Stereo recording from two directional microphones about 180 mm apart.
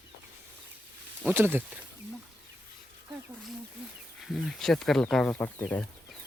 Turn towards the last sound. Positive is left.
turn(degrees=10)  # may be behind; listen again after turning